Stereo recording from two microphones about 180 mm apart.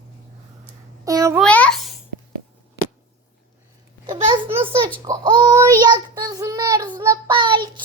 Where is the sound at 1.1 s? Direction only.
20° right (ahead or behind).